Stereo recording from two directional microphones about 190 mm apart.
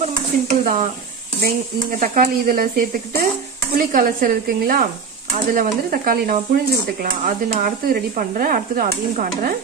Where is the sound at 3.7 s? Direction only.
50° right (ahead or behind).